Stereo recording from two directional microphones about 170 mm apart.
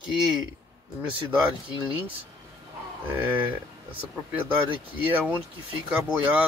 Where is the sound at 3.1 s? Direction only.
10° right (ahead or behind).